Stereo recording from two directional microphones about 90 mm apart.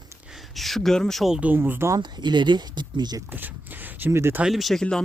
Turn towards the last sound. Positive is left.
turn(degrees=0)  # may be behind; listen again after turning